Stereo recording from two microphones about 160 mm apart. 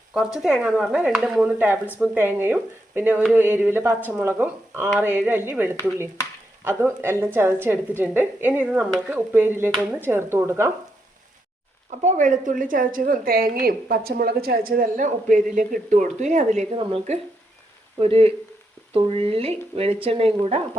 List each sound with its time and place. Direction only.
0.4 s speech: 5° right (ahead or behind)
12.0 s a woman's voice: 50° right (ahead or behind)
19.3 s a woman's voice: 40° right (ahead or behind)